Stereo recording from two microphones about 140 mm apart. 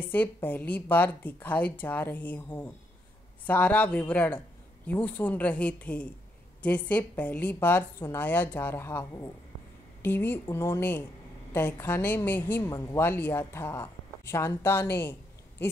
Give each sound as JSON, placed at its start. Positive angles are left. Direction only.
{"t": 0.1, "sound": "a woman's voice", "side_deg": 15}